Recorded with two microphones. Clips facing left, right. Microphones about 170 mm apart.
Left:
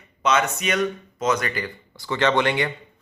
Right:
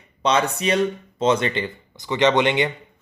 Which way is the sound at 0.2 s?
30° right (ahead or behind).